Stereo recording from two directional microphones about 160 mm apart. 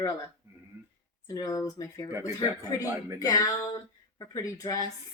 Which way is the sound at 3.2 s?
20° left (ahead or behind).